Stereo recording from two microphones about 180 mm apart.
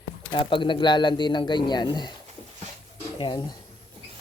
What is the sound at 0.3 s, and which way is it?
Speech, 30° left (ahead or behind).